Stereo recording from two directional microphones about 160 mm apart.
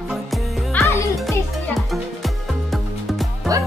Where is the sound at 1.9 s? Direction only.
Centre (ahead or behind).